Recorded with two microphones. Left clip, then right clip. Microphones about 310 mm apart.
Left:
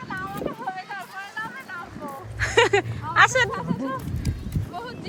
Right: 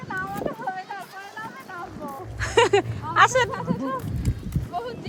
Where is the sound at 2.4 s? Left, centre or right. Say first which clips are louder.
Even; centre.